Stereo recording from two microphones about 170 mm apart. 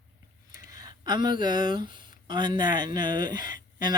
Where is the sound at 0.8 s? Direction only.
25° right (ahead or behind).